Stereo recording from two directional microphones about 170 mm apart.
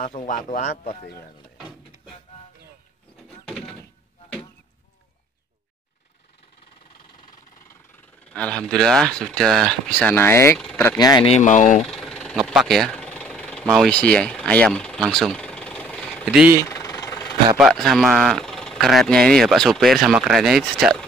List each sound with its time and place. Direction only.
0.0 s speech: 50° left (ahead or behind)
8.3 s speech: 5° left (ahead or behind)
11.0 s speech: 25° left (ahead or behind)
11.2 s speech: 40° left (ahead or behind)
11.9 s engine: 5° left (ahead or behind)
16.3 s speech: 10° right (ahead or behind)
16.6 s vehicle: 15° left (ahead or behind)
17.6 s speech: centre (ahead or behind)